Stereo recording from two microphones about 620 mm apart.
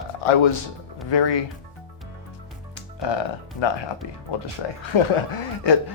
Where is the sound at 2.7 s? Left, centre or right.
Left.